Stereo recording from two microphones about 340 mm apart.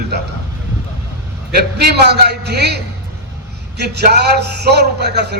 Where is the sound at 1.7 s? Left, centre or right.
Right.